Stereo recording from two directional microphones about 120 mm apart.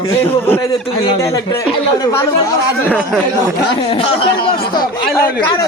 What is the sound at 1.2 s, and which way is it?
Speech, 25° left (ahead or behind).